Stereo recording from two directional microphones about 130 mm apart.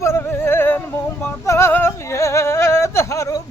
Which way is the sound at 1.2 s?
20° left (ahead or behind).